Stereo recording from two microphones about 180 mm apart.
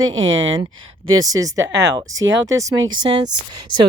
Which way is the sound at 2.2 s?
90° right.